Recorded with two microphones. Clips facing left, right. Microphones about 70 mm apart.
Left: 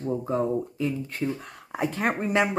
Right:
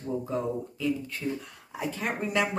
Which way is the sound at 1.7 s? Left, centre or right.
Left.